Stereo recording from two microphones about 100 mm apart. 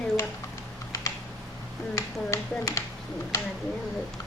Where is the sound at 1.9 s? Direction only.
35° left (ahead or behind).